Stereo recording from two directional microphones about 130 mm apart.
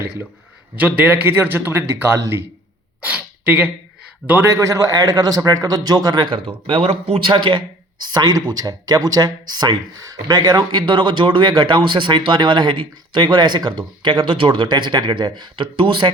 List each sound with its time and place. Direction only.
0.8 s a man's voice: 10° right (ahead or behind); by 6.2 s 30° right (ahead or behind)
6.7 s speech: 50° right (ahead or behind)
7.3 s speech: 35° right (ahead or behind)